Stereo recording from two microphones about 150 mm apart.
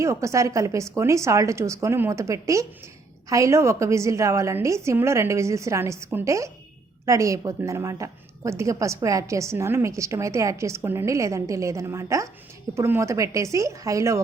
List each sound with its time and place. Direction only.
0.0 s a woman's voice: 20° right (ahead or behind)